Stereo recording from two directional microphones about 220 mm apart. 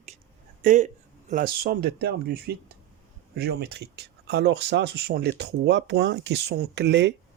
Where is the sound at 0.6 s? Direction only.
35° right (ahead or behind).